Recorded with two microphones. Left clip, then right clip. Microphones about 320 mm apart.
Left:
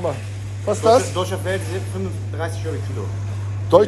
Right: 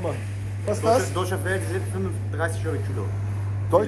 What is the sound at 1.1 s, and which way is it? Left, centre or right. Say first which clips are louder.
Speech: left 3 dB; centre.